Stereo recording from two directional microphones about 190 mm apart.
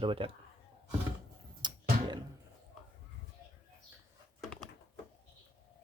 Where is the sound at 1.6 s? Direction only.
25° right (ahead or behind).